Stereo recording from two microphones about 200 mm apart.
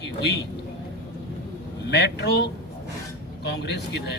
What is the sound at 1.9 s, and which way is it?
Speech, 60° left (ahead or behind).